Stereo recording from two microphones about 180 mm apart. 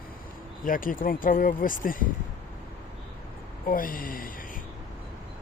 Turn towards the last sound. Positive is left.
turn(degrees=50)  # may be behind; listen again after turning